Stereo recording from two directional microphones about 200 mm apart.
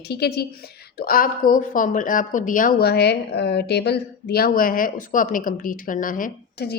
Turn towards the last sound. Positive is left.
turn(degrees=50)  # may be behind; listen again after turning